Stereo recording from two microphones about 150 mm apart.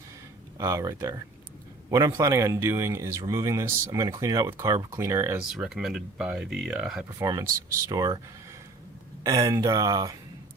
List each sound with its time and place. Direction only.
0.6 s speech: 20° right (ahead or behind)
5.4 s speech: 5° right (ahead or behind)
7.2 s speech: 20° right (ahead or behind)
9.2 s speech: 20° right (ahead or behind)